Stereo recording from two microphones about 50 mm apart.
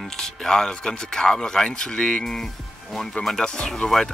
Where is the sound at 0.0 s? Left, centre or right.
Centre.